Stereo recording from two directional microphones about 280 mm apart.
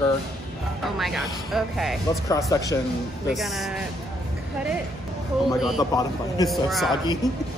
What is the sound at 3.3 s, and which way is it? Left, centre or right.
Speech, centre.